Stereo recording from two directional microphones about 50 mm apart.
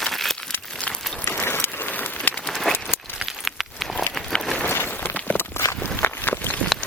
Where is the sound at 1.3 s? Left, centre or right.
Left.